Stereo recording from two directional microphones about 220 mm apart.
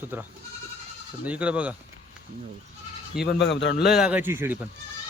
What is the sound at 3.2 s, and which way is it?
Speech, 50° left (ahead or behind).